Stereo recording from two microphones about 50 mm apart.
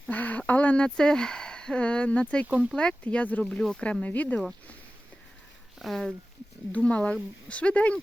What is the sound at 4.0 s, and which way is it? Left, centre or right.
Speech, left.